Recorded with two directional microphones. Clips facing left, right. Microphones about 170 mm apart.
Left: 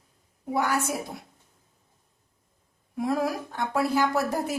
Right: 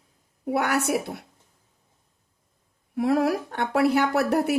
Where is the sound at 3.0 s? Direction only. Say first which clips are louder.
Right 5 dB; 65° right (ahead or behind).